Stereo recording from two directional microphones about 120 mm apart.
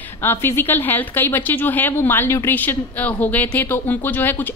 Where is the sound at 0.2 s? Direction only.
20° left (ahead or behind).